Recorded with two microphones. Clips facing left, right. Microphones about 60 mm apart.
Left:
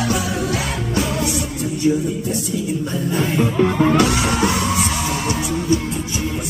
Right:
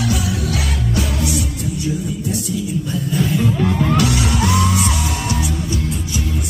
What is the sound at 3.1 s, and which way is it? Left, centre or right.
Music, left.